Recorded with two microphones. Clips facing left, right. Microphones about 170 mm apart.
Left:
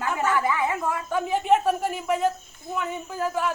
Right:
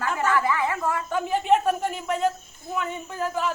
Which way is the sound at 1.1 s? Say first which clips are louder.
Left 1 dB; centre (ahead or behind).